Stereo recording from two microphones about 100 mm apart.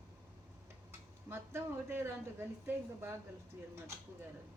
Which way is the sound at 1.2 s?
25° right (ahead or behind).